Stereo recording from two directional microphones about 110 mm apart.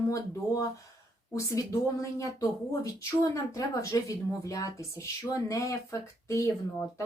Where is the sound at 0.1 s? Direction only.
30° left (ahead or behind).